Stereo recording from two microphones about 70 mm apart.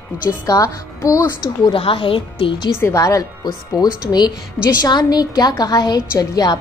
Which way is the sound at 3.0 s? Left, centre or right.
Left.